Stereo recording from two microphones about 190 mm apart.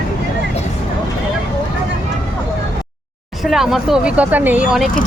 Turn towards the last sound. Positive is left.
turn(degrees=-5)  # may be behind; listen again after turning